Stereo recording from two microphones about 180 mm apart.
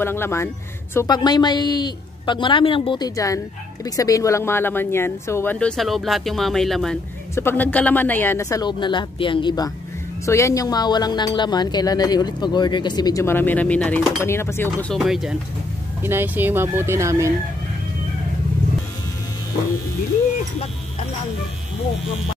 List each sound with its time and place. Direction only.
0.0 s speech: 15° left (ahead or behind)
15.0 s speech: centre (ahead or behind)